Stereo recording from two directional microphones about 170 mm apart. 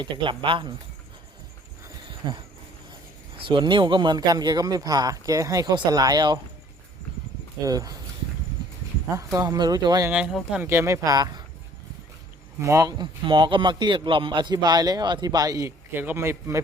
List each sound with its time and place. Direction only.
0.0 s a man's voice: 30° right (ahead or behind)
2.2 s a man's voice: 25° right (ahead or behind)
7.6 s a man's voice: 20° right (ahead or behind)
9.1 s a man's voice: 20° right (ahead or behind)
10.1 s a man's voice: 5° right (ahead or behind); by 11.4 s 25° right (ahead or behind)
12.6 s a man's voice: 20° right (ahead or behind)